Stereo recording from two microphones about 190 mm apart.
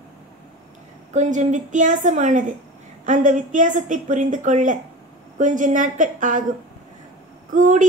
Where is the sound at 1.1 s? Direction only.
40° right (ahead or behind).